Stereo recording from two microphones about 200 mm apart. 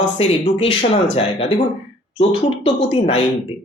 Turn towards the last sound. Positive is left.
turn(degrees=30)  # may be behind; listen again after turning